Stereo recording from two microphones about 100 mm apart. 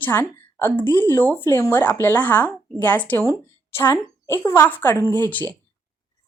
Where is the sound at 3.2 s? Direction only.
25° left (ahead or behind).